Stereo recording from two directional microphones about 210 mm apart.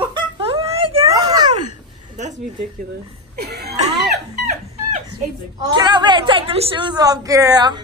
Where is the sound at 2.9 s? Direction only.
50° right (ahead or behind).